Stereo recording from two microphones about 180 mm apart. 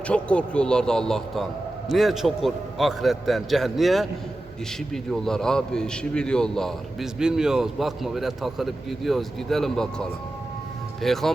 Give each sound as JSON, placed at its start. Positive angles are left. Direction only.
{"t": 0.1, "sound": "a man's voice", "side_deg": 5}
{"t": 5.1, "sound": "a man's voice", "side_deg": 5}